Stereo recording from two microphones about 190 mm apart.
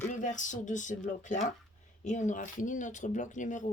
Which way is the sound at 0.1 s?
40° left (ahead or behind).